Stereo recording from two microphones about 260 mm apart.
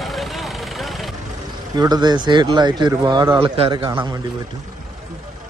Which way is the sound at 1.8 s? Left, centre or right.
Centre.